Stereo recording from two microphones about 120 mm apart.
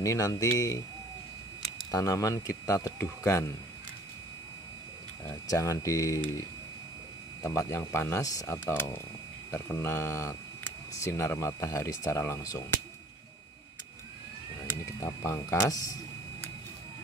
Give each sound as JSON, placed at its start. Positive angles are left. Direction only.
{"t": 0.0, "sound": "speech", "side_deg": 30}
{"t": 1.9, "sound": "speech", "side_deg": 30}
{"t": 5.5, "sound": "speech", "side_deg": 25}
{"t": 7.4, "sound": "speech", "side_deg": 20}
{"t": 14.9, "sound": "speech", "side_deg": 25}